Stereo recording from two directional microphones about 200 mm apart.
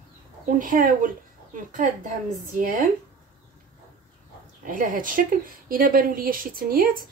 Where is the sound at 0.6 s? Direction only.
40° right (ahead or behind).